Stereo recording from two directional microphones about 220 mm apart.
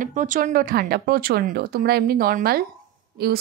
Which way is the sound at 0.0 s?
35° right (ahead or behind).